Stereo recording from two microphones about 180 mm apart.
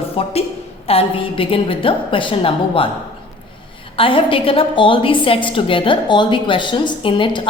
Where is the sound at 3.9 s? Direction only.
30° left (ahead or behind).